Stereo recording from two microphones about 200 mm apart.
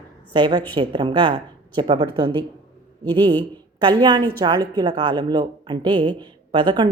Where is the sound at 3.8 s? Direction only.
20° right (ahead or behind).